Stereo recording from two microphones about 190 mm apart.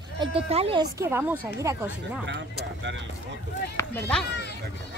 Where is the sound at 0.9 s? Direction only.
10° right (ahead or behind).